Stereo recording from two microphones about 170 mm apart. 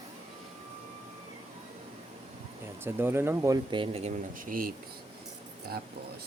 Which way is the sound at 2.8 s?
15° right (ahead or behind).